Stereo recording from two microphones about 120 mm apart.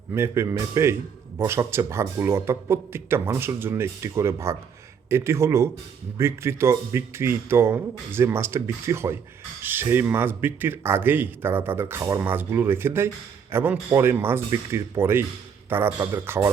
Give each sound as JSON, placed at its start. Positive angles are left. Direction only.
{"t": 0.1, "sound": "speech", "side_deg": -20}